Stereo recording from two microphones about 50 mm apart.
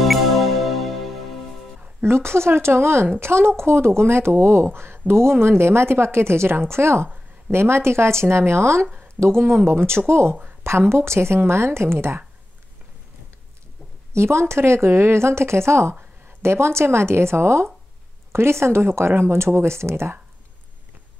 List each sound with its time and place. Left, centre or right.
0.0 s music: centre
2.0 s speech: right
9.0 s speech: right
14.1 s speech: right